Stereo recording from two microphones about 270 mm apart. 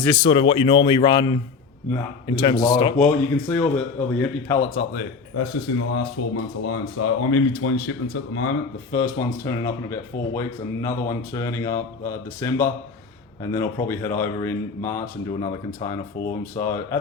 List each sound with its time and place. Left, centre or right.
0.1 s speech: centre
5.4 s speech: left
8.9 s speech: centre